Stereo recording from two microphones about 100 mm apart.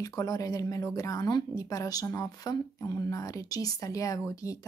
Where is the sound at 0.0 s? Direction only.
40° left (ahead or behind).